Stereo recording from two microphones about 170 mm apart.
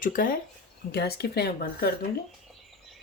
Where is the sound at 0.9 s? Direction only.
70° left (ahead or behind).